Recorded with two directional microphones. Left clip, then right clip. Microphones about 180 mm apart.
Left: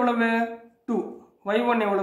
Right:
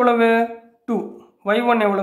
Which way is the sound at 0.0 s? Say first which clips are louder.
Right 8 dB; 45° right (ahead or behind).